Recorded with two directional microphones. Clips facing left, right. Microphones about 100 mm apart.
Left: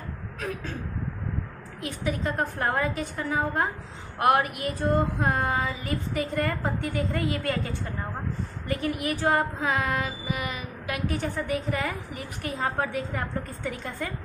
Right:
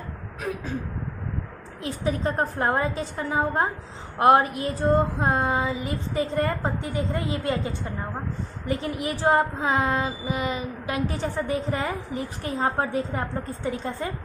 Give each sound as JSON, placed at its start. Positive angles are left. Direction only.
{"t": 1.8, "sound": "a woman's voice", "side_deg": -30}